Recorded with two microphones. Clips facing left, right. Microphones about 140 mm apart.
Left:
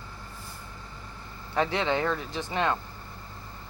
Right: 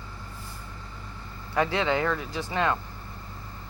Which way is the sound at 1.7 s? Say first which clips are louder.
Right 1 dB; 20° left (ahead or behind).